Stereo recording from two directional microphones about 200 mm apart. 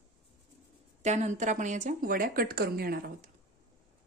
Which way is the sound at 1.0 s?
35° right (ahead or behind).